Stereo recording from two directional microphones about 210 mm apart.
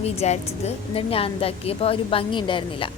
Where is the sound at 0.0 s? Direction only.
30° left (ahead or behind).